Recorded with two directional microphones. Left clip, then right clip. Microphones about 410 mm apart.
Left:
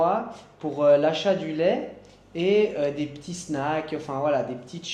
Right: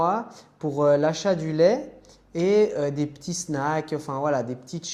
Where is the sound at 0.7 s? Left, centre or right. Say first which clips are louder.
Left 1 dB; right.